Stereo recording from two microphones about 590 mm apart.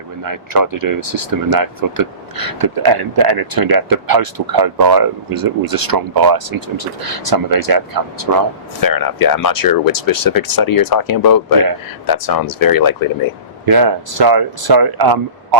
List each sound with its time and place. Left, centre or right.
0.2 s speech: right
8.8 s speech: left
13.7 s speech: right